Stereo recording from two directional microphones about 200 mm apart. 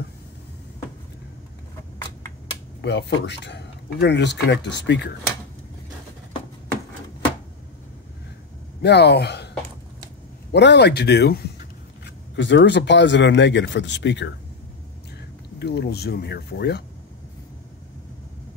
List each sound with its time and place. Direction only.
2.8 s speech: 60° left (ahead or behind)
8.8 s speech: 55° left (ahead or behind)
10.5 s speech: 60° left (ahead or behind)
15.6 s speech: 55° left (ahead or behind)